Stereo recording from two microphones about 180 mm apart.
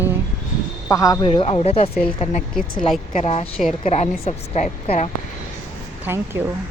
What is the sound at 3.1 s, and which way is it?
A woman's voice, 40° left (ahead or behind).